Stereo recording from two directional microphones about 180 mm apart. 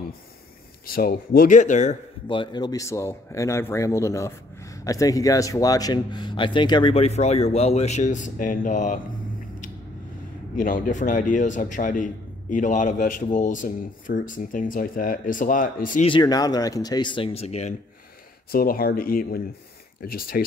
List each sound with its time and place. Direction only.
0.8 s a man's voice: 55° left (ahead or behind)
2.2 s a man's voice: 25° left (ahead or behind); by 9.0 s 45° left (ahead or behind)
10.5 s a man's voice: 50° left (ahead or behind)
16.1 s speech: 20° left (ahead or behind)
18.5 s speech: 55° left (ahead or behind)